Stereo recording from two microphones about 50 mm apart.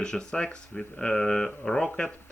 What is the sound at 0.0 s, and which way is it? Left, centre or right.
Speech, centre.